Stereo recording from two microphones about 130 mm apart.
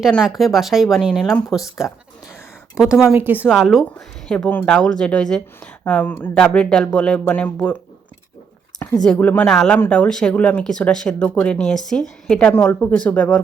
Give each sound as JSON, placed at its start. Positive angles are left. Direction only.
{"t": 0.2, "sound": "speech", "side_deg": 0}
{"t": 2.7, "sound": "speech", "side_deg": -5}
{"t": 3.1, "sound": "speech", "side_deg": -15}
{"t": 3.5, "sound": "speech", "side_deg": 0}
{"t": 8.8, "sound": "a sound", "side_deg": 15}
{"t": 9.1, "sound": "speech", "side_deg": 10}